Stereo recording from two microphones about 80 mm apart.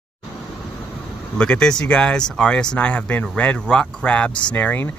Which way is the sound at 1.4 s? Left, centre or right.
Centre.